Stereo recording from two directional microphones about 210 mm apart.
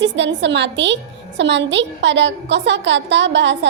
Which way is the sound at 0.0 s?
60° right (ahead or behind).